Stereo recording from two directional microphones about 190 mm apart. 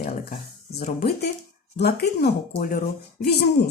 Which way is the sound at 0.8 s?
55° left (ahead or behind).